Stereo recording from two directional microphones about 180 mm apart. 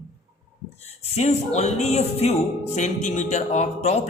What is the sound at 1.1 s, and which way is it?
Speech, 35° left (ahead or behind).